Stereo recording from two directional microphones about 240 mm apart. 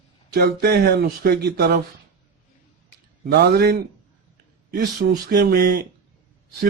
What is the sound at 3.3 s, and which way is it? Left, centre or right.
Speech, right.